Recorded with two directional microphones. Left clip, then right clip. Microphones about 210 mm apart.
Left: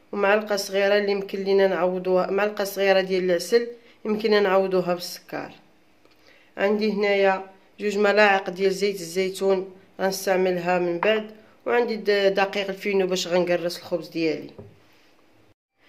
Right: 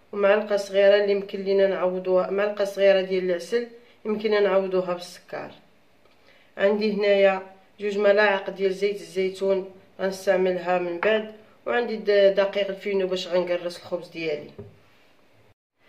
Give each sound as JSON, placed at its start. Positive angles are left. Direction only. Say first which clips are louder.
{"t": 0.1, "sound": "a man's voice", "louder": "right 1 dB", "side_deg": 50}
{"t": 6.5, "sound": "a man's voice", "louder": "right 1 dB", "side_deg": 40}